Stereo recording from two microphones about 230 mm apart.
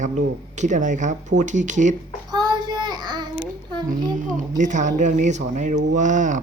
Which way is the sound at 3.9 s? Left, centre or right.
Right.